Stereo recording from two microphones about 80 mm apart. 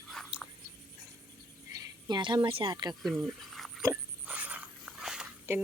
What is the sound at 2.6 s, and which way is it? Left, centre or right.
Speech, right.